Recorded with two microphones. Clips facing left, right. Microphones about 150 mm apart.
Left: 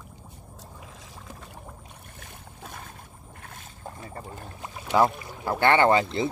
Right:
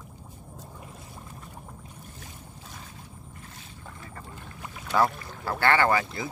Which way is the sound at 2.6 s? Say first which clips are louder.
Left 6 dB; 55° left (ahead or behind).